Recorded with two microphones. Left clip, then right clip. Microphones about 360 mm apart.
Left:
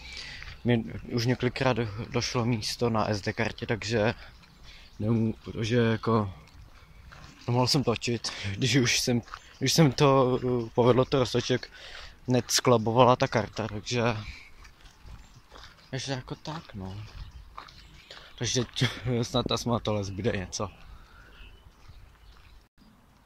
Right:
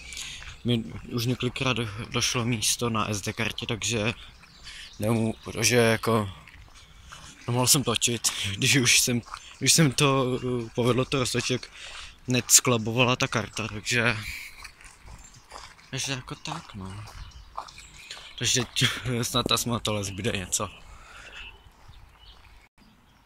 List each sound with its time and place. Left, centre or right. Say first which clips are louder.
0.0 s speech: right 3 dB; centre
4.7 s speech: right 3 dB; centre
7.4 s speech: right 1 dB; centre
15.9 s speech: right 2 dB; centre
18.0 s speech: right 6 dB; centre